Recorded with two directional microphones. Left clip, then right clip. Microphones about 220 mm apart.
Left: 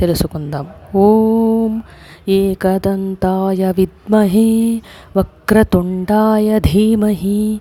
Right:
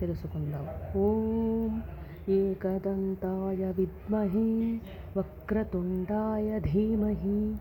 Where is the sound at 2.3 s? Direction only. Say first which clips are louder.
Left 14 dB; 45° left (ahead or behind).